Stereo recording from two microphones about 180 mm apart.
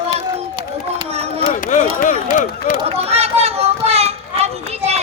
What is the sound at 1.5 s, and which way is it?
Chop, 45° left (ahead or behind).